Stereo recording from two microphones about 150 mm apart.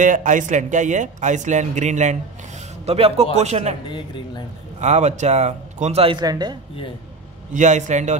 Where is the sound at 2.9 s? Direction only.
40° right (ahead or behind).